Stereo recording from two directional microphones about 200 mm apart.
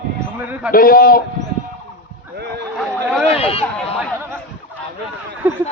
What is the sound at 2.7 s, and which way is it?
Chatter, centre (ahead or behind).